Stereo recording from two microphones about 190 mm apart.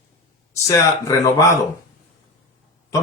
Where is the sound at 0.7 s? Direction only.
20° left (ahead or behind).